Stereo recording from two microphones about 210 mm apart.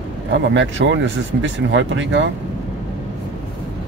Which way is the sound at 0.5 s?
60° right (ahead or behind).